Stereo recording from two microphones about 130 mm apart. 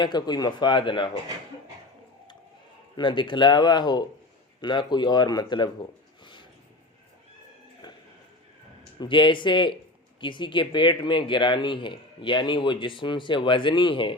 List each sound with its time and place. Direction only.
0.0 s speech: 35° left (ahead or behind)
2.9 s speech: 40° left (ahead or behind)
9.0 s speech: 40° left (ahead or behind)